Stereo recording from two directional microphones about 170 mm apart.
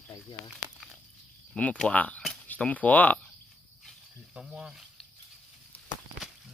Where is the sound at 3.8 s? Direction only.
Centre (ahead or behind).